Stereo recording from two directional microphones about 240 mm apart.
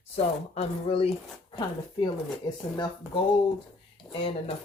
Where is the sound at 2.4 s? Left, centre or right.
Left.